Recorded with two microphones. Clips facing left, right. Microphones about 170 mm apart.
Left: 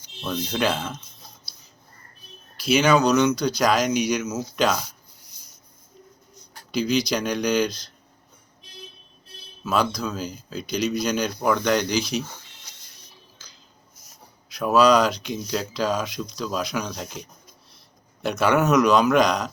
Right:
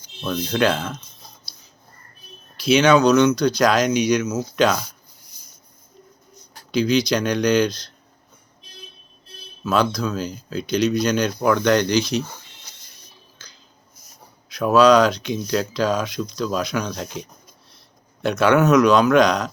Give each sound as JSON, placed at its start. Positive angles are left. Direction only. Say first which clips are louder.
{"t": 0.3, "sound": "speech", "louder": "right 4 dB", "side_deg": 5}
{"t": 2.6, "sound": "speech", "louder": "right 4 dB", "side_deg": 5}
{"t": 6.7, "sound": "speech", "louder": "right 4 dB", "side_deg": 5}
{"t": 9.6, "sound": "speech", "louder": "right 3 dB", "side_deg": 5}
{"t": 14.5, "sound": "speech", "louder": "right 4 dB", "side_deg": 5}